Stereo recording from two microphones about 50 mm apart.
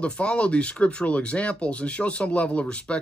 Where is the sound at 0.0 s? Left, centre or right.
Left.